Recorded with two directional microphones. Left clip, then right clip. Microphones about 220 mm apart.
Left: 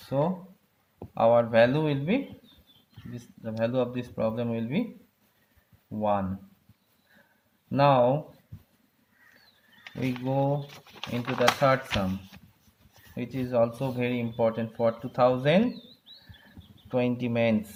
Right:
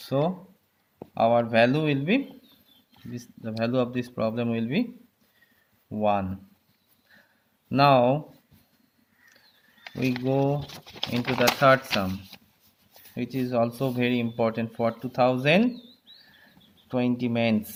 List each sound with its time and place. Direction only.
0.9 s speech: 25° right (ahead or behind)
6.0 s speech: 30° right (ahead or behind)
7.7 s speech: 30° right (ahead or behind)
9.8 s a sound: 40° right (ahead or behind)
10.2 s speech: 35° right (ahead or behind)
13.1 s speech: 25° right (ahead or behind)
16.9 s speech: 20° right (ahead or behind)